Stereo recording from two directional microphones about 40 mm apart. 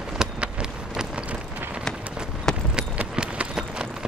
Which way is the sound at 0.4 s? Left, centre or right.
Right.